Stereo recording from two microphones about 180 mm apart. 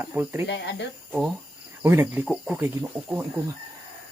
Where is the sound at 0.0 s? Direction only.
10° right (ahead or behind).